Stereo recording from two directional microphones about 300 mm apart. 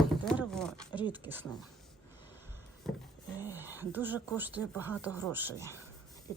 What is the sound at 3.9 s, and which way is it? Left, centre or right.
Speech, centre.